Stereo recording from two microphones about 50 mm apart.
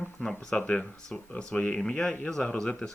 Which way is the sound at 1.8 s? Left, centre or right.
Centre.